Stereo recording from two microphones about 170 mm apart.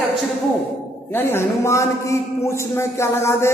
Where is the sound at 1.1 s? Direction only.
15° left (ahead or behind).